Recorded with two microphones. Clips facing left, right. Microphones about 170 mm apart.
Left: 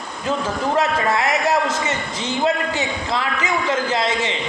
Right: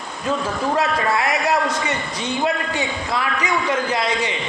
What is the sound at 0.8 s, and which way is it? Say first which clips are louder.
A man's voice: left 2 dB; 20° left (ahead or behind).